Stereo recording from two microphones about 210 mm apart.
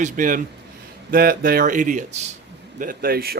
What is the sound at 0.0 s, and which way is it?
A man's voice, 40° right (ahead or behind).